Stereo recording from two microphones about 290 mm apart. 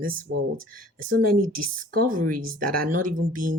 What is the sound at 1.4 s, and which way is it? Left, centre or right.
Speech, right.